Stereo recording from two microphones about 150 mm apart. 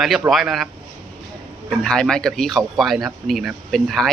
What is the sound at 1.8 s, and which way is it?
Speech, 5° left (ahead or behind).